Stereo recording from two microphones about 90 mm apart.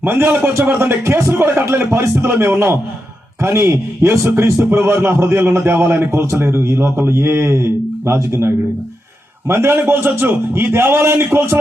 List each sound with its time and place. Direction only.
0.0 s a man's voice: 25° right (ahead or behind)